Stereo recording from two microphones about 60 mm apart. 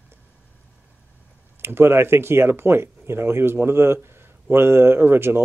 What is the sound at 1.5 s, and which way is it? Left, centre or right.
Speech, right.